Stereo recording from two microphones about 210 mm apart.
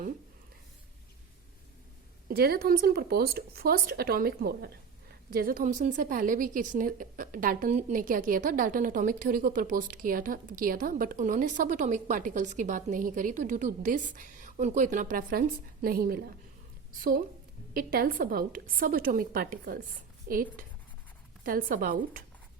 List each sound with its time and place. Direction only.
2.3 s a woman's voice: 50° right (ahead or behind)